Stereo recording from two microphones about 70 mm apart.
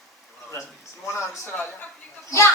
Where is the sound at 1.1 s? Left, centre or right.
Left.